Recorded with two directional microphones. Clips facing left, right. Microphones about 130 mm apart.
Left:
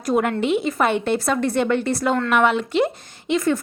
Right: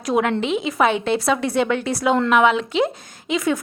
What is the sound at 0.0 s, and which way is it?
Speech, centre (ahead or behind).